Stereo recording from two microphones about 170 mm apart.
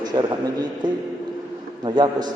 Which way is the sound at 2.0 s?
25° right (ahead or behind).